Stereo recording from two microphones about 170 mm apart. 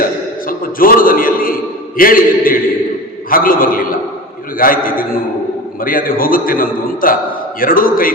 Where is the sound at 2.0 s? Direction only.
55° left (ahead or behind).